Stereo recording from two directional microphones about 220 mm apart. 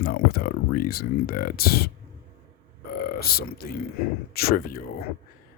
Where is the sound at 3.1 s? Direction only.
45° left (ahead or behind).